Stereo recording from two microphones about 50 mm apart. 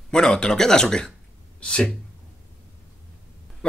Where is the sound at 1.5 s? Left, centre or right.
Centre.